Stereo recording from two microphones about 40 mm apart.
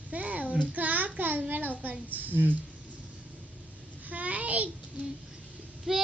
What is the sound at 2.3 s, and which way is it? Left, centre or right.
Speech, left.